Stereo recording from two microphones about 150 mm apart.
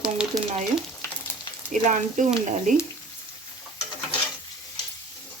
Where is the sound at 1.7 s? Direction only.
60° right (ahead or behind).